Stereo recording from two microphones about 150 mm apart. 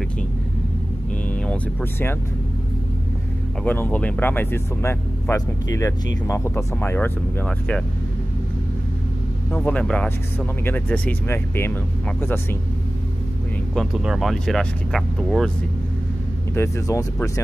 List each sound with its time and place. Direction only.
1.4 s speech: 10° left (ahead or behind)
3.6 s speech: 10° left (ahead or behind)
9.5 s speech: 10° left (ahead or behind)
13.7 s speech: centre (ahead or behind)
16.5 s speech: 20° left (ahead or behind)